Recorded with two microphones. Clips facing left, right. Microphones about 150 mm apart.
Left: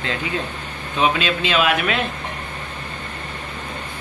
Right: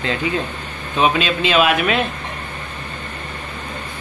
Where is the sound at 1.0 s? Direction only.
20° right (ahead or behind).